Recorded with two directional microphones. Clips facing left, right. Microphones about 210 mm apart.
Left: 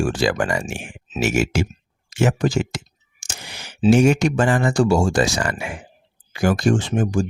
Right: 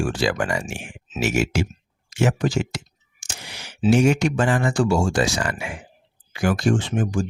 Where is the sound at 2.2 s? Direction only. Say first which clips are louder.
Left 2 dB; 45° left (ahead or behind).